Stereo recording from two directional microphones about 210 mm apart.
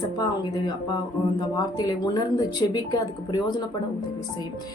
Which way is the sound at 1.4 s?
20° left (ahead or behind).